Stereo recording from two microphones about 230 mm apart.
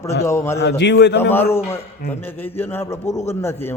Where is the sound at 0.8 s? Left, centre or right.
Left.